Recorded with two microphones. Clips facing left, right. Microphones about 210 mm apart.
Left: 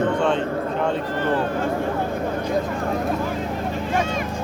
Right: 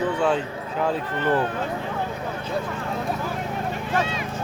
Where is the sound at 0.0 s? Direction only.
5° right (ahead or behind).